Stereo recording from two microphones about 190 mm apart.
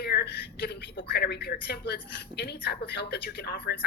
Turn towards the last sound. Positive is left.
turn(degrees=60)  # may be behind; listen again after turning